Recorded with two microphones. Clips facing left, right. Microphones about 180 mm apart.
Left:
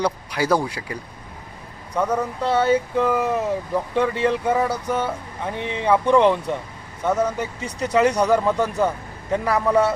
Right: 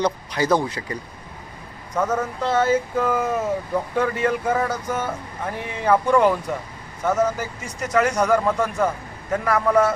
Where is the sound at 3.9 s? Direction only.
25° left (ahead or behind).